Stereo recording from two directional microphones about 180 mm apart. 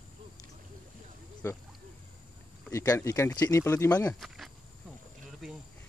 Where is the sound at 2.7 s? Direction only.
15° left (ahead or behind).